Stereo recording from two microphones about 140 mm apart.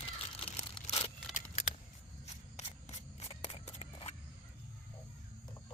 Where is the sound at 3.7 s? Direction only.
50° left (ahead or behind).